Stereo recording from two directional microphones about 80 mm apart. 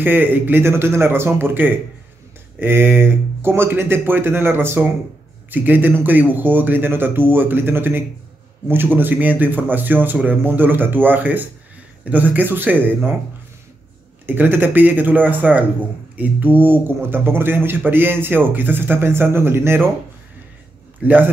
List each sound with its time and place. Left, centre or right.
0.0 s speech: right
14.2 s speech: right
21.0 s a man's voice: right